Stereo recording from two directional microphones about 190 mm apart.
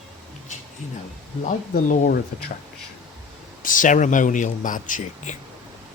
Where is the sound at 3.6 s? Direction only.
45° left (ahead or behind).